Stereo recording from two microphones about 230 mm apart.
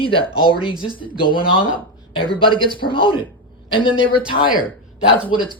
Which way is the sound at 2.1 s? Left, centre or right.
Left.